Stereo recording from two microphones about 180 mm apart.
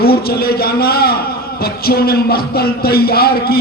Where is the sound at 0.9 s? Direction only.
60° left (ahead or behind).